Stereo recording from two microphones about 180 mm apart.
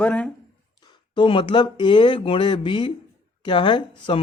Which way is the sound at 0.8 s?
25° left (ahead or behind).